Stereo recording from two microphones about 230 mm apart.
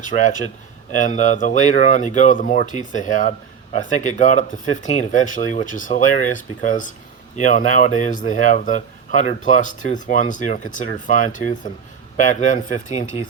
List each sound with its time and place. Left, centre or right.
0.1 s speech: left